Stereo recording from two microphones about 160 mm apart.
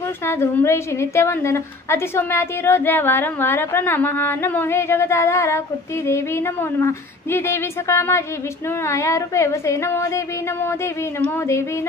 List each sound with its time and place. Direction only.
0.3 s a woman's voice: 15° left (ahead or behind)